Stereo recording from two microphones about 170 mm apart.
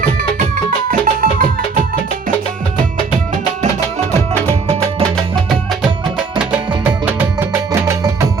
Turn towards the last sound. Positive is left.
turn(degrees=-10)  # may be behind; listen again after turning